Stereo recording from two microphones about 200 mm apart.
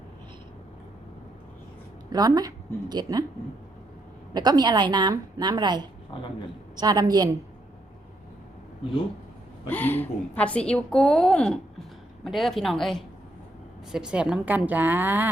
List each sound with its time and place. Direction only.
2.0 s a woman's voice: 20° right (ahead or behind)
4.4 s a woman's voice: 20° right (ahead or behind)
9.6 s a woman's voice: 10° left (ahead or behind); by 15.3 s 10° right (ahead or behind)